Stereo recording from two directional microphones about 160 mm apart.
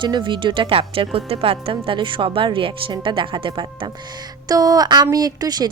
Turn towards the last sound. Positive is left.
turn(degrees=-25)  # may be behind; listen again after turning